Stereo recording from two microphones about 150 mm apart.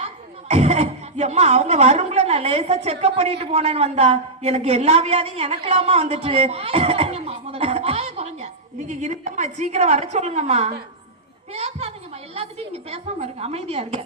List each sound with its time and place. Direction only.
0.0 s speech: 45° right (ahead or behind)